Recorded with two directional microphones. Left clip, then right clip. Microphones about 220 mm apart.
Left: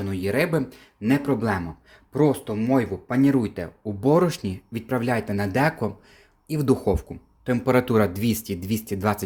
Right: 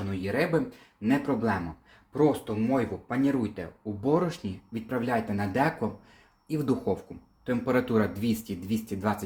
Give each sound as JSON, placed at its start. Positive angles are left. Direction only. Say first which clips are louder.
{"t": 0.1, "sound": "speech", "louder": "left 4 dB", "side_deg": 50}